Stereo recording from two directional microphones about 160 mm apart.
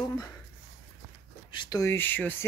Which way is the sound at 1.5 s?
25° left (ahead or behind).